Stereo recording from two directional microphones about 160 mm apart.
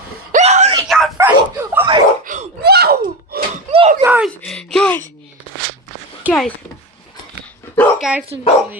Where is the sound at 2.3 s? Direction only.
55° right (ahead or behind).